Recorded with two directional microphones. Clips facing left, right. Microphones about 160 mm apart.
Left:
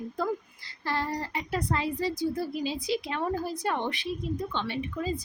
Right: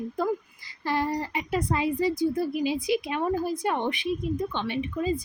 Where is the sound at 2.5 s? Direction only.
15° right (ahead or behind).